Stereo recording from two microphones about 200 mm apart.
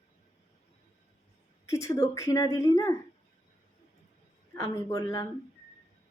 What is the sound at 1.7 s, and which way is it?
A woman's voice, 15° left (ahead or behind).